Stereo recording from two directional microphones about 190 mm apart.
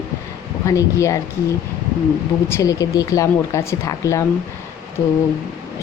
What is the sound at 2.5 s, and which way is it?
A woman's voice, 15° left (ahead or behind).